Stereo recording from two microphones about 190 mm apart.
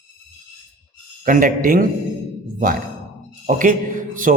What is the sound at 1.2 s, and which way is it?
Speech, 45° right (ahead or behind).